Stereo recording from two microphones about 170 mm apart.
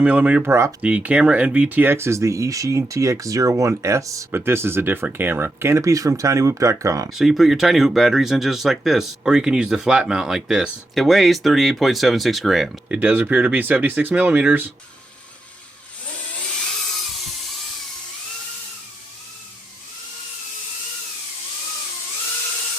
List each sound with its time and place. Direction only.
0.0 s speech: 10° right (ahead or behind)
7.1 s speech: centre (ahead or behind)